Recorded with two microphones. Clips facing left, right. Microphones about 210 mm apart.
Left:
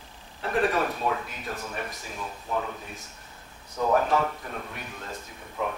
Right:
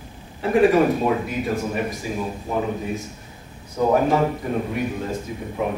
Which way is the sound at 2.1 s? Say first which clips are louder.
Right 4 dB; 30° right (ahead or behind).